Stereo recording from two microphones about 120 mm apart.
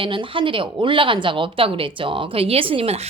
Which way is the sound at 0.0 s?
45° right (ahead or behind).